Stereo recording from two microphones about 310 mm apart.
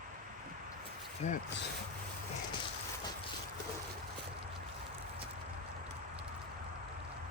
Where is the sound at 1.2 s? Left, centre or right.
Left.